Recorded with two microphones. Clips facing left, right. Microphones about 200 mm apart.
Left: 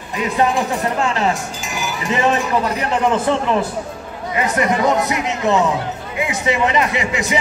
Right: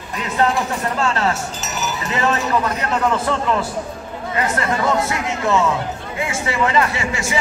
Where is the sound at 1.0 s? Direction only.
15° left (ahead or behind).